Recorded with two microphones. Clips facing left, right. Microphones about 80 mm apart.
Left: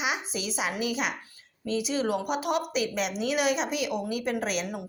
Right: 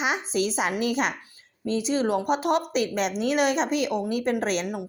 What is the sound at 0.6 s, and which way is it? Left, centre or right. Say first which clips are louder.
A woman's voice: right 4 dB; right.